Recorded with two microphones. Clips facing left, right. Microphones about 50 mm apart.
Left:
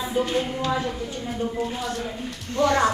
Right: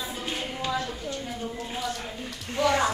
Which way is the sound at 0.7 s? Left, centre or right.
Centre.